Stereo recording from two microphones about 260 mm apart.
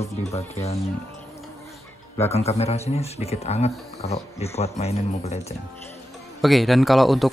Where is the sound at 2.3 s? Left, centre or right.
Left.